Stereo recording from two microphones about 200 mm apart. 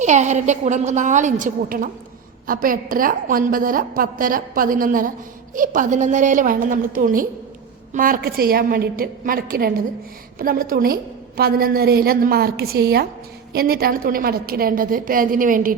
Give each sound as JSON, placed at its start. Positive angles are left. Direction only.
{"t": 0.0, "sound": "a woman's voice", "side_deg": -35}